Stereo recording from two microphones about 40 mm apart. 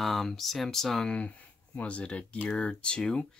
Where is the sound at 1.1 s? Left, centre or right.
Left.